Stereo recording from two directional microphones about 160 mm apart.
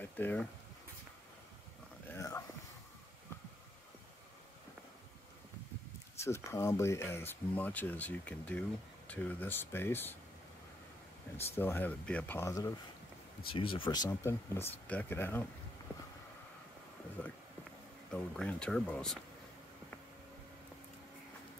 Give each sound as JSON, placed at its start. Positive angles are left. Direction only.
{"t": 0.0, "sound": "speech", "side_deg": 10}
{"t": 2.1, "sound": "a sound", "side_deg": 20}
{"t": 6.1, "sound": "speech", "side_deg": 15}
{"t": 11.3, "sound": "speech", "side_deg": 15}
{"t": 13.5, "sound": "speech", "side_deg": 35}
{"t": 18.1, "sound": "speech", "side_deg": 5}